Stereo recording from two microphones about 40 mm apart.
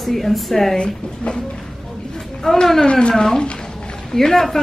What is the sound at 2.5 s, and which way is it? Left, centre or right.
Speech, centre.